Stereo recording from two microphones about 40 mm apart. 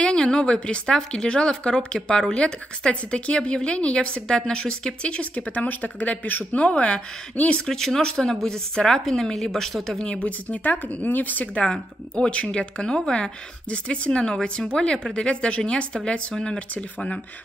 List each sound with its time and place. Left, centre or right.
0.0 s a woman's voice: left
7.6 s a woman's voice: centre
10.1 s speech: left
11.6 s a woman's voice: left